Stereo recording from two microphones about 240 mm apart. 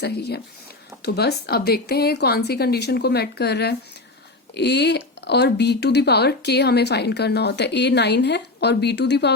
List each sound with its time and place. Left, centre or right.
0.0 s speech: left